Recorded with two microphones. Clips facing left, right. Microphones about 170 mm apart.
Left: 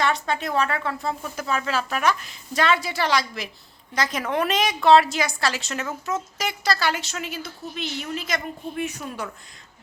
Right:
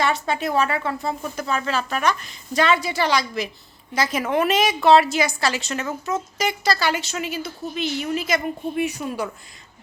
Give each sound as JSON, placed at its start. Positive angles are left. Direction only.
{"t": 0.0, "sound": "a woman's voice", "side_deg": -5}